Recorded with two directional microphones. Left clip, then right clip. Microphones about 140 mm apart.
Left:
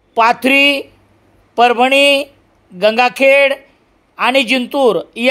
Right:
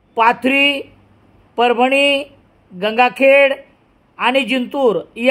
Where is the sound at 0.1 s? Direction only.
35° left (ahead or behind).